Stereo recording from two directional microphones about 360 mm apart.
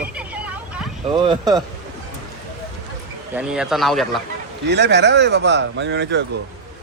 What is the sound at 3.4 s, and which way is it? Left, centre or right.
Speech, centre.